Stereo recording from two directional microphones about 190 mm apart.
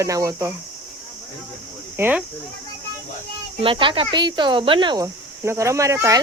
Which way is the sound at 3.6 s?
25° right (ahead or behind).